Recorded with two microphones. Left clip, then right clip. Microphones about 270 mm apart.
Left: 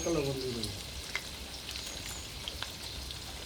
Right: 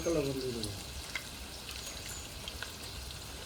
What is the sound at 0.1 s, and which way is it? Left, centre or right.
Speech, centre.